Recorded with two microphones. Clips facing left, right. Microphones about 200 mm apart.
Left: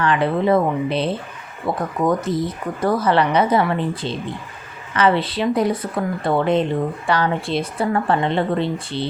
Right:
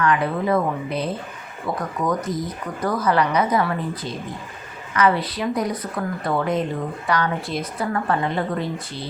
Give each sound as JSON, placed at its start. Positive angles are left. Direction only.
{"t": 0.0, "sound": "a woman's voice", "side_deg": 30}